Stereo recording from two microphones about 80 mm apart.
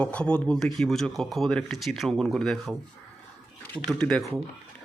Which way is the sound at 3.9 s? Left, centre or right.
Centre.